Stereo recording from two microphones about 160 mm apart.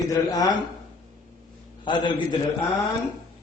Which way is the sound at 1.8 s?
30° left (ahead or behind).